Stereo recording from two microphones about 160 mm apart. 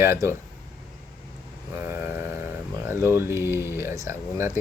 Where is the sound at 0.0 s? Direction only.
15° right (ahead or behind).